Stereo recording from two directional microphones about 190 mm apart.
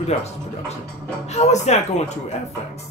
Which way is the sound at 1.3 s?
35° left (ahead or behind).